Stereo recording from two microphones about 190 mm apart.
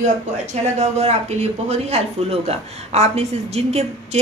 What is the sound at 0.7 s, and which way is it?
A woman's voice, 35° right (ahead or behind).